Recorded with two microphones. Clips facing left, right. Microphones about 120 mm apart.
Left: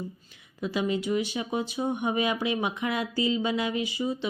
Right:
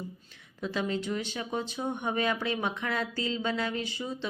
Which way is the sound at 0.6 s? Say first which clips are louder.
Left 3 dB; 10° left (ahead or behind).